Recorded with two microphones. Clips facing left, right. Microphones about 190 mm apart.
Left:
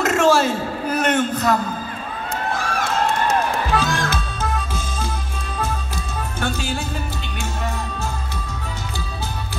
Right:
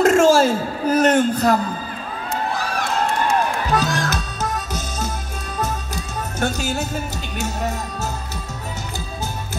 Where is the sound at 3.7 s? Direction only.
40° right (ahead or behind).